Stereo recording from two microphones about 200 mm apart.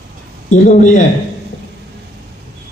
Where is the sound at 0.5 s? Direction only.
40° left (ahead or behind).